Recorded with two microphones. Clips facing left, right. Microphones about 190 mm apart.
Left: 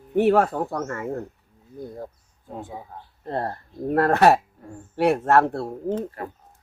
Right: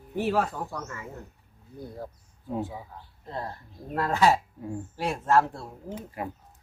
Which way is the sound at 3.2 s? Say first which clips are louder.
Left 8 dB; 60° left (ahead or behind).